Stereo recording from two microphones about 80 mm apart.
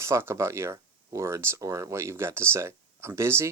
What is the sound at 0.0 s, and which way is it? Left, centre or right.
Speech, right.